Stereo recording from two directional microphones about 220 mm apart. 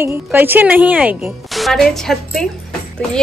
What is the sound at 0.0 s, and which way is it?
A woman's voice, 10° right (ahead or behind).